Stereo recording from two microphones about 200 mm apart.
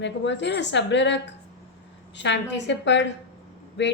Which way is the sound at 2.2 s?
60° left (ahead or behind).